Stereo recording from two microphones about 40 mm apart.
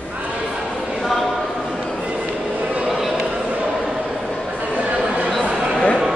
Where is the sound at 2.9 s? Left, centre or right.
Centre.